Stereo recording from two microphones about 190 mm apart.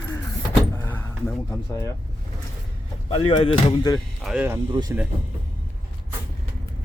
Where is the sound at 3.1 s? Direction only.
30° left (ahead or behind).